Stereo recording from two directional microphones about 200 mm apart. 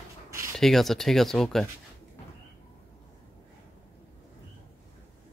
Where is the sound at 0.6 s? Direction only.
Centre (ahead or behind).